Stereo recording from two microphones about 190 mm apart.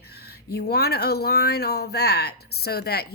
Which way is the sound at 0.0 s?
55° left (ahead or behind).